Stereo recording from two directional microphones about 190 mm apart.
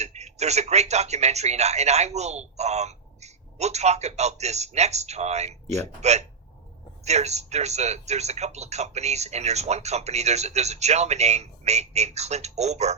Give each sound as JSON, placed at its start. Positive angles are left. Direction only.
{"t": 0.0, "sound": "speech", "side_deg": -35}